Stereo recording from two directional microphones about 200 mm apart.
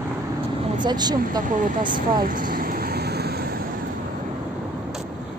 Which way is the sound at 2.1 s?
45° right (ahead or behind).